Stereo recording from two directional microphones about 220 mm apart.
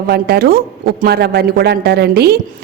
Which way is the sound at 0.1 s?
45° right (ahead or behind).